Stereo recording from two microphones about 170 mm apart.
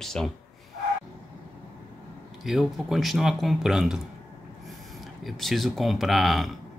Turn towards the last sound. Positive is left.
turn(degrees=0)  # may be behind; listen again after turning